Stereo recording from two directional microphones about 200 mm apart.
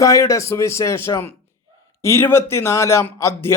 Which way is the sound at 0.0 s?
15° left (ahead or behind).